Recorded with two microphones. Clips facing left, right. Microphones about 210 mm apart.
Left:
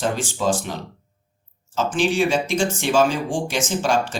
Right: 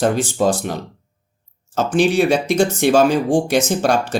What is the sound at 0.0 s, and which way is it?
Speech, 60° right (ahead or behind).